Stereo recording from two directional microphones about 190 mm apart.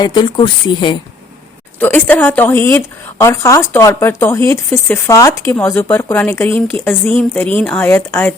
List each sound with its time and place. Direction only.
0.0 s speech: 25° left (ahead or behind)
1.8 s a woman's voice: 10° left (ahead or behind)